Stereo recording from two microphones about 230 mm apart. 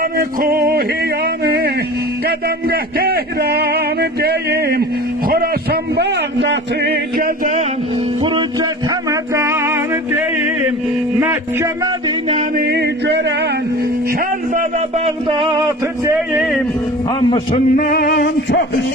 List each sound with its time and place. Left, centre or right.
0.0 s a sound: right
8.2 s music: centre
12.3 s a sound: right
14.1 s speech: right; by 16.1 s centre
16.1 s speech: centre
17.2 s a man's voice: left
17.8 s music: left